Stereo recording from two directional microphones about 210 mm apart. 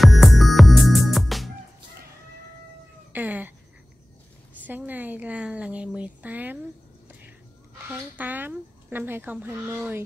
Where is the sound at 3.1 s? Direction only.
10° right (ahead or behind).